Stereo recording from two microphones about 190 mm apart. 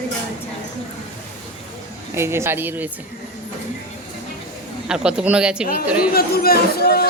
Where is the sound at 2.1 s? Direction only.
15° right (ahead or behind).